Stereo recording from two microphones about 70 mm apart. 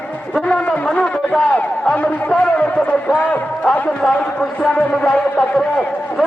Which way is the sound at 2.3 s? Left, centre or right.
Centre.